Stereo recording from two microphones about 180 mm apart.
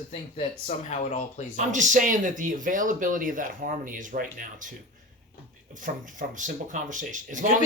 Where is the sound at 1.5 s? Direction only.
45° right (ahead or behind).